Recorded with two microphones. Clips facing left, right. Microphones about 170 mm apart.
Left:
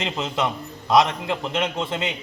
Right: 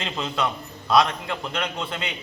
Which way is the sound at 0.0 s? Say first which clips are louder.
Left 2 dB; 20° left (ahead or behind).